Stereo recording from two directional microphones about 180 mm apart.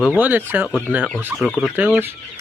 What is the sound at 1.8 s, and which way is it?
Speech, 10° right (ahead or behind).